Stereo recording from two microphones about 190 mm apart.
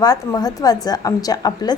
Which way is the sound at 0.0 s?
20° left (ahead or behind).